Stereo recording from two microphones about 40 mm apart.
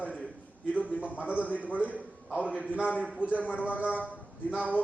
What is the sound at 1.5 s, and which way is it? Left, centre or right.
Speech, left.